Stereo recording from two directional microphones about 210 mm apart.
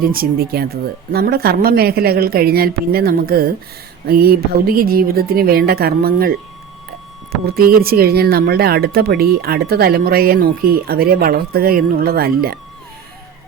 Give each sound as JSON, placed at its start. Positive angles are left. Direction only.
{"t": 0.1, "sound": "speech", "side_deg": -45}
{"t": 7.4, "sound": "speech", "side_deg": -45}